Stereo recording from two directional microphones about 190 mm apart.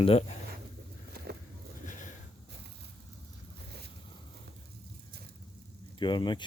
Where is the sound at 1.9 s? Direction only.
40° left (ahead or behind).